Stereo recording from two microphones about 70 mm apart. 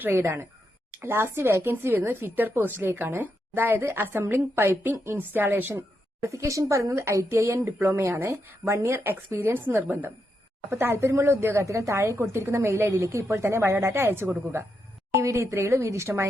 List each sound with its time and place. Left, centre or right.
0.0 s a woman's voice: right
6.2 s a woman's voice: right
15.1 s a woman's voice: right